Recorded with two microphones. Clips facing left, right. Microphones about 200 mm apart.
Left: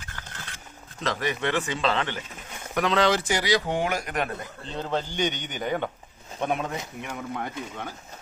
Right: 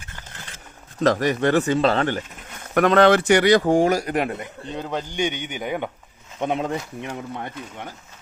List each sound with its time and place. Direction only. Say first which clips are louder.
1.0 s speech: right 9 dB; 45° right (ahead or behind)
2.7 s speech: right 7 dB; 55° right (ahead or behind); by 5.9 s 10° right (ahead or behind)
6.4 s speech: right 3 dB; 25° right (ahead or behind)